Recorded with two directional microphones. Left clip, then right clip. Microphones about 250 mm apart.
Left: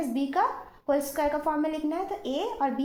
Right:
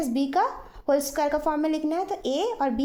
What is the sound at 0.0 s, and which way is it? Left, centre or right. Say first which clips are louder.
Speech: right 2 dB; right.